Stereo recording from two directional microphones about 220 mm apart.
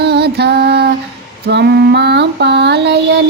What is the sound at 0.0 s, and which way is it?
Female singing, 50° right (ahead or behind).